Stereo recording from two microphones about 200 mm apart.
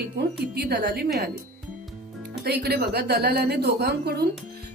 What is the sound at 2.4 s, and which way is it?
A woman's voice, 50° right (ahead or behind).